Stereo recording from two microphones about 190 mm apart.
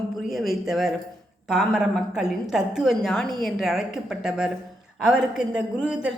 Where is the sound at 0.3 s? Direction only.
Centre (ahead or behind).